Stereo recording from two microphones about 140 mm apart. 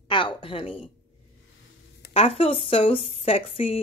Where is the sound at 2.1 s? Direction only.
45° left (ahead or behind).